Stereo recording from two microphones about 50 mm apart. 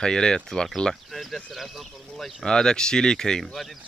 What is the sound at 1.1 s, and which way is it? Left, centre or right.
Speech, centre.